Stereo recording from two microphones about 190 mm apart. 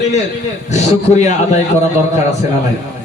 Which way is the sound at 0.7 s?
35° left (ahead or behind).